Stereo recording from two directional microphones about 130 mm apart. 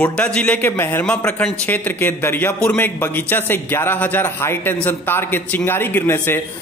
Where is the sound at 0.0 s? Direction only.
10° left (ahead or behind).